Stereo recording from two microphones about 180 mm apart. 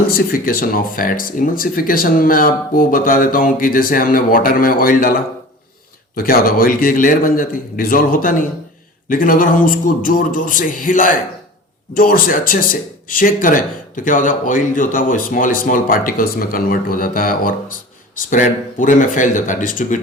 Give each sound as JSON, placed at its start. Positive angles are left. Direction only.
{"t": 0.1, "sound": "speech", "side_deg": 55}
{"t": 6.1, "sound": "speech", "side_deg": 55}